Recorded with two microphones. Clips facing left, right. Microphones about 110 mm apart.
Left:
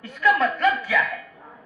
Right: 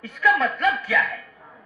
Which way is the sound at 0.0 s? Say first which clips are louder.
Left 1 dB; centre (ahead or behind).